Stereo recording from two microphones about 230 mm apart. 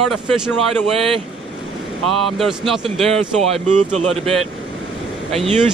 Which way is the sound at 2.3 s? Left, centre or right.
Centre.